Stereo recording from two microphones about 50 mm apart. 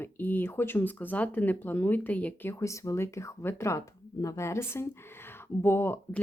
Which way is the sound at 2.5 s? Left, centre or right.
Left.